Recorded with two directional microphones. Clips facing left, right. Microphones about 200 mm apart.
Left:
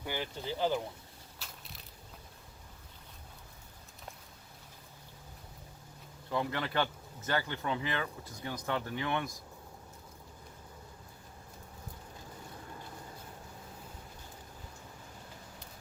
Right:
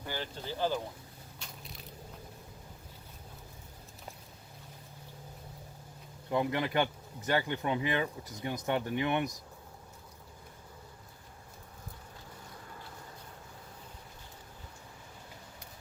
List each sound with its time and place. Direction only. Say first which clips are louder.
0.0 s speech: left 1 dB; 15° left (ahead or behind)
1.4 s crushing: right 2 dB; centre (ahead or behind)
6.3 s speech: right 3 dB; 15° right (ahead or behind)